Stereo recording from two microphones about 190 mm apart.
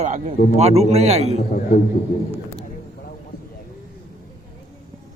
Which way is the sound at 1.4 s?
45° left (ahead or behind).